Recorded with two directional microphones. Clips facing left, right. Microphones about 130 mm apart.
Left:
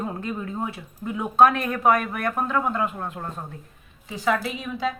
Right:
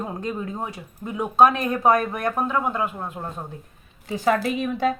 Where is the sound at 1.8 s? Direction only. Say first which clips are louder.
Right 1 dB; 35° right (ahead or behind).